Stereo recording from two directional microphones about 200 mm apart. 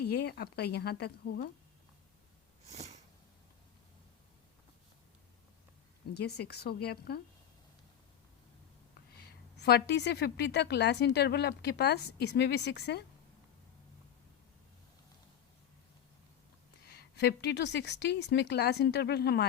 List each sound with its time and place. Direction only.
0.0 s speech: 55° left (ahead or behind)
2.6 s a sound: 35° right (ahead or behind)
6.1 s speech: 55° left (ahead or behind)
9.1 s a woman's voice: 55° left (ahead or behind)
16.8 s a woman's voice: 55° left (ahead or behind)